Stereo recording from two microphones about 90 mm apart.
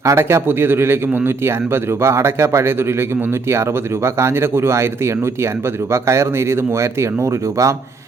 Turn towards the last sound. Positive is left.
turn(degrees=-35)  # may be behind; listen again after turning